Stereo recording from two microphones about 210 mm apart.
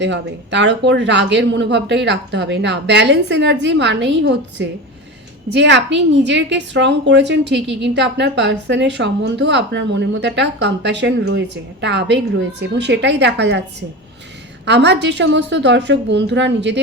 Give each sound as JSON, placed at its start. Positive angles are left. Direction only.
{"t": 0.0, "sound": "a woman's voice", "side_deg": -55}
{"t": 14.6, "sound": "a woman's voice", "side_deg": -55}